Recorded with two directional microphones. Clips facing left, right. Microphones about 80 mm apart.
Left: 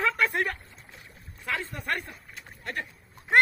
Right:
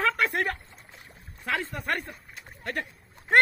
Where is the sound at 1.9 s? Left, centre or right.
Centre.